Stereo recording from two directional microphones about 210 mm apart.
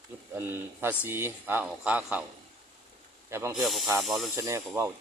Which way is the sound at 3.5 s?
Centre (ahead or behind).